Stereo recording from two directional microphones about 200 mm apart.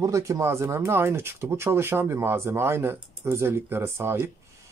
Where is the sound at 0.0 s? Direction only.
15° right (ahead or behind).